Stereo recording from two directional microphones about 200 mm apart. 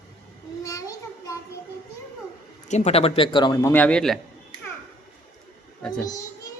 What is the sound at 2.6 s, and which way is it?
A man's voice, 35° left (ahead or behind).